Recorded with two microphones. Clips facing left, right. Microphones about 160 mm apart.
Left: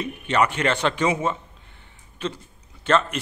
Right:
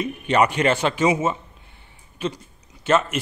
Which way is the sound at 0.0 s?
15° right (ahead or behind).